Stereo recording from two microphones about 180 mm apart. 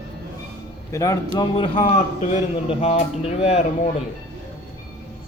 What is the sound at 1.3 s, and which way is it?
A man's voice, 30° left (ahead or behind).